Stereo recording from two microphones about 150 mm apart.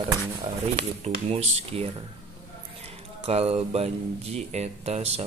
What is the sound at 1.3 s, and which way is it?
Speech, 45° right (ahead or behind).